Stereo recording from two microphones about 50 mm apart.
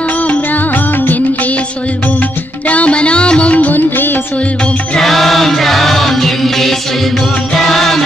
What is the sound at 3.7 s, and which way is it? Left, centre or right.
Music, left.